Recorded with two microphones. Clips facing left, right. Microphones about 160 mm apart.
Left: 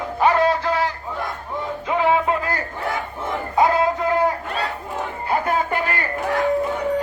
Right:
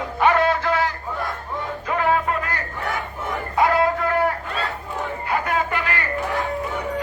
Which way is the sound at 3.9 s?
20° left (ahead or behind).